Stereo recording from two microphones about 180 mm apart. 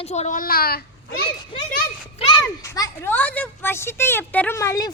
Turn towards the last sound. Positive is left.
turn(degrees=15)  # may be behind; listen again after turning